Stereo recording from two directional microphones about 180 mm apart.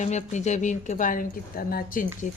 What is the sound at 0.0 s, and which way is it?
A woman's voice, 40° left (ahead or behind).